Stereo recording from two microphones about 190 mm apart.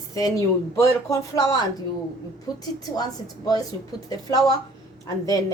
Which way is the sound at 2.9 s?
20° left (ahead or behind).